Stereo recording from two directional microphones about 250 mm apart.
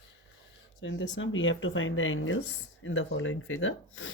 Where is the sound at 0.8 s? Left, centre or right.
Left.